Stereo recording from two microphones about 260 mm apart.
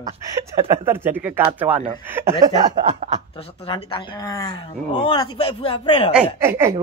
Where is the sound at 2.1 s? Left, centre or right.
Centre.